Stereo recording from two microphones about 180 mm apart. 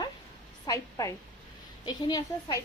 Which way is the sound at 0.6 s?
20° left (ahead or behind).